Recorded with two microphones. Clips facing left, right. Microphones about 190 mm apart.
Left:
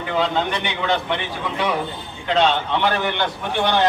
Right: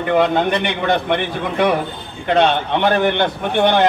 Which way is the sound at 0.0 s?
55° right (ahead or behind).